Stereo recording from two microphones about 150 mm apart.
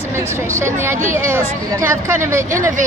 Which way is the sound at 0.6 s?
15° right (ahead or behind).